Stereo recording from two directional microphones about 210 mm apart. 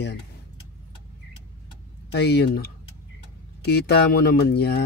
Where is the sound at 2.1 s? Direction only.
55° left (ahead or behind).